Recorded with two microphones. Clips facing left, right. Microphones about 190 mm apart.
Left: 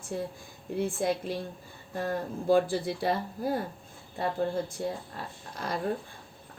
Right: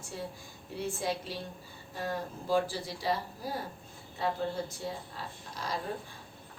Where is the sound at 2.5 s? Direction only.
55° left (ahead or behind).